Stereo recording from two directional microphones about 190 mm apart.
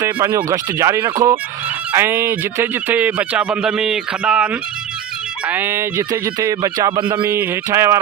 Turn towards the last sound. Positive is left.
turn(degrees=-15)  # may be behind; listen again after turning